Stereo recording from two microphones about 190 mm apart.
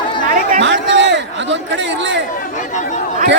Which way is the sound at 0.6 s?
70° right (ahead or behind).